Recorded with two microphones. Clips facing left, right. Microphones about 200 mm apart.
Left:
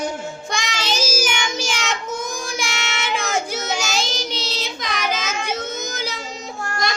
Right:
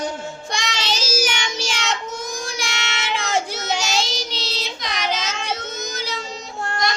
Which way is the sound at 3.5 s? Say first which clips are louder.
Even; 50° left (ahead or behind).